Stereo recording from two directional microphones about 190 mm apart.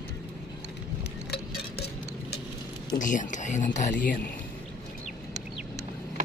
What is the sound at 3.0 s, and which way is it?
Speech, 40° left (ahead or behind).